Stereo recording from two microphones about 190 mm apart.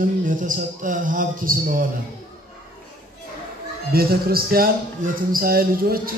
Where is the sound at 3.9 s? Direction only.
50° right (ahead or behind).